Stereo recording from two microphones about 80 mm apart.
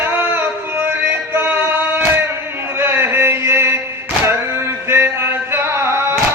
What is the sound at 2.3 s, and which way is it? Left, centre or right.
Chant, right.